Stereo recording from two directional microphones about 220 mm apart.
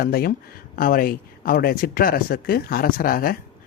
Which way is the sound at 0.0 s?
40° left (ahead or behind).